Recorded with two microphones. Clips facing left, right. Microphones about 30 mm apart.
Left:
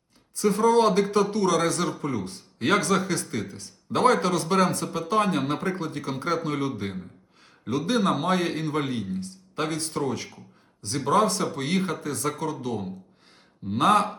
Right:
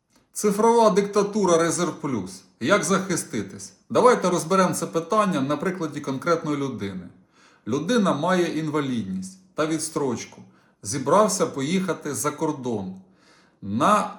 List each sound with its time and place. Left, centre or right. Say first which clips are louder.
0.3 s a man's voice: right 2 dB; left